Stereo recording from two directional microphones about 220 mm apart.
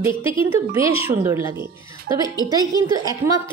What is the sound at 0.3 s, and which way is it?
A woman's voice, 15° right (ahead or behind).